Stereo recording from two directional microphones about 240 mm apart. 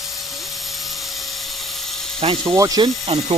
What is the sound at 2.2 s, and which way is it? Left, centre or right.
Speech, right.